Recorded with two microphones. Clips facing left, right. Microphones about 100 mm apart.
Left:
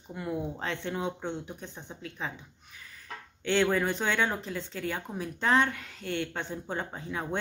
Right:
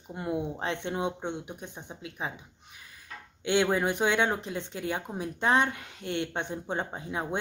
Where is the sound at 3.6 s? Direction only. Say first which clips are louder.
Right 2 dB; 20° right (ahead or behind).